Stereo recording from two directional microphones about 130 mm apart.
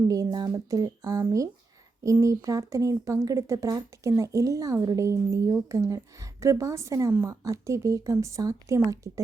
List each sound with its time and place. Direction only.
0.1 s speech: 25° right (ahead or behind)